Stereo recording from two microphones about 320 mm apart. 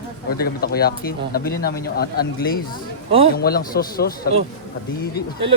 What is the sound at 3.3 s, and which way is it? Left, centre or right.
Speech, left.